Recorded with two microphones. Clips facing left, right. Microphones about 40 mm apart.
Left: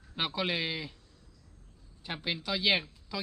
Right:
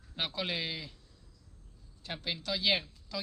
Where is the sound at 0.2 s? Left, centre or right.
Centre.